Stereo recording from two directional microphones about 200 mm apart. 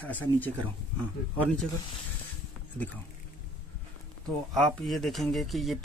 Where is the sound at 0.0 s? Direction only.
10° left (ahead or behind).